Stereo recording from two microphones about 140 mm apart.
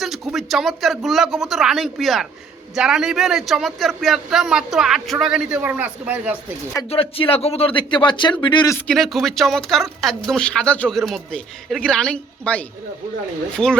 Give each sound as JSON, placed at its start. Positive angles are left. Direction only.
{"t": 0.0, "sound": "a man's voice", "side_deg": 0}
{"t": 6.9, "sound": "speech", "side_deg": 40}
{"t": 8.9, "sound": "a man's voice", "side_deg": 0}